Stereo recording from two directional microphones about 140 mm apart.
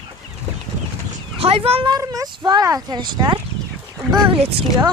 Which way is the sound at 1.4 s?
45° right (ahead or behind).